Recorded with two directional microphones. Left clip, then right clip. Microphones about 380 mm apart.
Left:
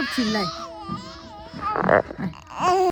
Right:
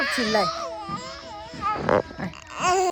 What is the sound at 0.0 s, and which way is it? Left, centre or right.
Baby cry, centre.